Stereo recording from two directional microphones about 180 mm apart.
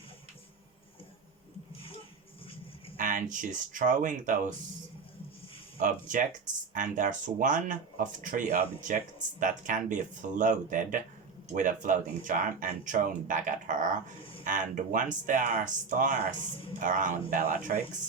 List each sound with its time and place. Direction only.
3.0 s speech: 45° right (ahead or behind)
5.8 s speech: 45° right (ahead or behind)
14.2 s a sound: 30° left (ahead or behind)
14.4 s speech: 45° right (ahead or behind)